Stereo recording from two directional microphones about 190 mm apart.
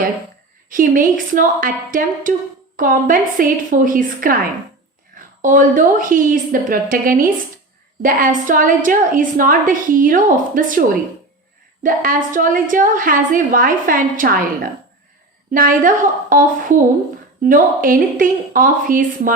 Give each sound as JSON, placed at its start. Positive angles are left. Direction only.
{"t": 0.7, "sound": "a woman's voice", "side_deg": -45}
{"t": 5.4, "sound": "a woman's voice", "side_deg": -45}